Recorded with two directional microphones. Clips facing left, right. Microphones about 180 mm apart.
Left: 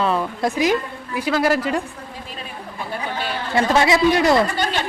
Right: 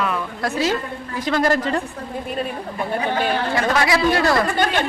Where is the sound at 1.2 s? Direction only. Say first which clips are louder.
Even; 10° left (ahead or behind).